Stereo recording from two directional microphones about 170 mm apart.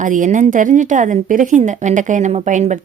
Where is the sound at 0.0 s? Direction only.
50° right (ahead or behind).